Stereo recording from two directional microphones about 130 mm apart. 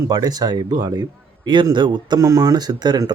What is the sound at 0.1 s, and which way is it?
Speech, 30° right (ahead or behind).